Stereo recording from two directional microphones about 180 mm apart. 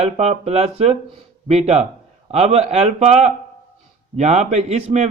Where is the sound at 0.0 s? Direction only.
35° right (ahead or behind).